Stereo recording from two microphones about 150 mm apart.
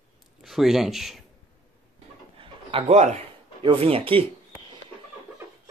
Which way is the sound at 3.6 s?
40° right (ahead or behind).